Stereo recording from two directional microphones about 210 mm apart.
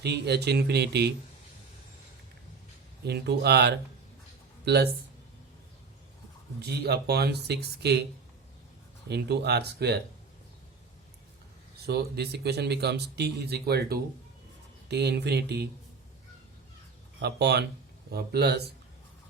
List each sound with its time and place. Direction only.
0.0 s speech: 50° right (ahead or behind)
3.1 s speech: 50° right (ahead or behind)
6.6 s speech: 50° right (ahead or behind)
9.0 s speech: 50° right (ahead or behind)
11.9 s speech: 50° right (ahead or behind)
17.2 s speech: 50° right (ahead or behind)